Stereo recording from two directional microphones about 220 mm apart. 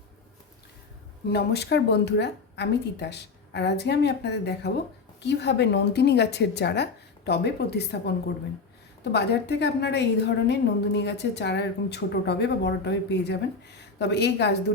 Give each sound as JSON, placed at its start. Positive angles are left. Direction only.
{"t": 1.3, "sound": "a woman's voice", "side_deg": 50}
{"t": 9.1, "sound": "a woman's voice", "side_deg": 50}